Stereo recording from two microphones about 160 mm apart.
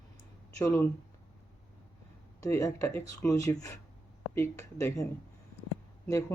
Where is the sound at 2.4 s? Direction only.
20° left (ahead or behind).